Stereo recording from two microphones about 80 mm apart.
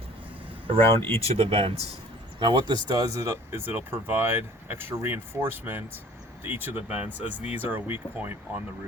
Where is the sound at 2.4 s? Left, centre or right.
Right.